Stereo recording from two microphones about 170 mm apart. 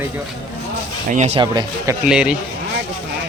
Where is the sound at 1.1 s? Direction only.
40° right (ahead or behind).